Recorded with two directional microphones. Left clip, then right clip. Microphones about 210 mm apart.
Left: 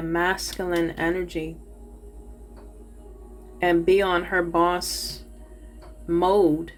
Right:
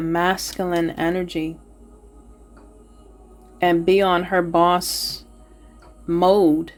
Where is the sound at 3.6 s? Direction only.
50° right (ahead or behind).